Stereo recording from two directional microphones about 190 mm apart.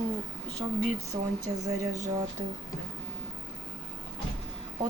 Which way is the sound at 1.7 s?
20° right (ahead or behind).